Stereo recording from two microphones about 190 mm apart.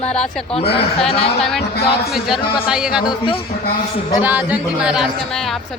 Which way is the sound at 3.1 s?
25° left (ahead or behind).